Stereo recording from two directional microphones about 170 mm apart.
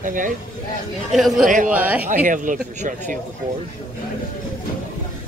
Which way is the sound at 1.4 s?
50° right (ahead or behind).